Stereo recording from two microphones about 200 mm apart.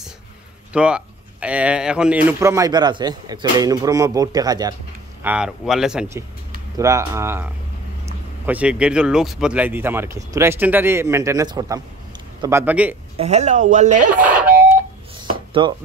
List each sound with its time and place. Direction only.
0.7 s speech: 5° right (ahead or behind)
5.2 s speech: 5° right (ahead or behind)
6.8 s speech: 15° right (ahead or behind)
8.5 s speech: 5° right (ahead or behind)
13.2 s speech: 35° right (ahead or behind)
14.2 s a sound: 5° right (ahead or behind)
15.6 s speech: 20° right (ahead or behind)